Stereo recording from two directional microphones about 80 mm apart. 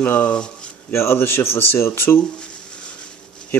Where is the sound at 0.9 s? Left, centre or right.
Left.